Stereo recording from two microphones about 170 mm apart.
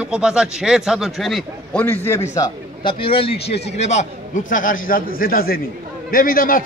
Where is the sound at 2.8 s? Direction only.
30° left (ahead or behind); by 6.6 s 55° left (ahead or behind).